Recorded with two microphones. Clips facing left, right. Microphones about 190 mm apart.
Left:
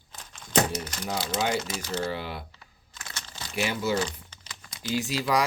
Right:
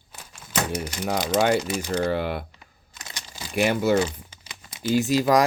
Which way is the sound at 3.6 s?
60° right (ahead or behind).